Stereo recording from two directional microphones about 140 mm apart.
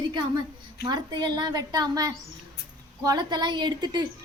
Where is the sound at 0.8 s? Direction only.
30° right (ahead or behind).